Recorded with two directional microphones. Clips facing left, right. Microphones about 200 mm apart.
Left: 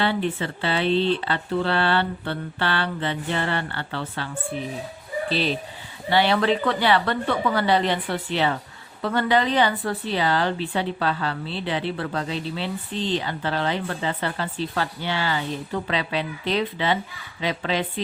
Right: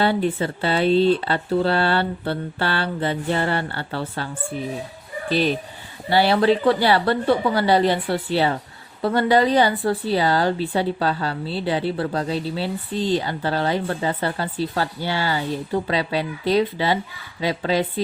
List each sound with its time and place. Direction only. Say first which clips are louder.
0.0 s speech: right 4 dB; 40° right (ahead or behind)
5.3 s speech: right 5 dB; 45° right (ahead or behind)
6.1 s speech: right 3 dB; 35° right (ahead or behind)